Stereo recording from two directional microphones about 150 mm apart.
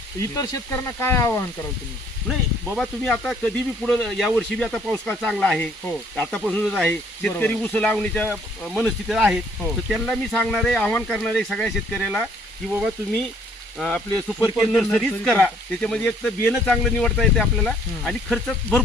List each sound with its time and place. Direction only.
0.2 s speech: 20° left (ahead or behind)
2.2 s speech: centre (ahead or behind)
13.7 s speech: 5° left (ahead or behind)
14.3 s speech: 10° right (ahead or behind)
14.6 s speech: centre (ahead or behind)